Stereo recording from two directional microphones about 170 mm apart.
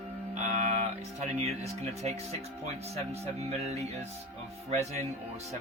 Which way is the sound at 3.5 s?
40° right (ahead or behind).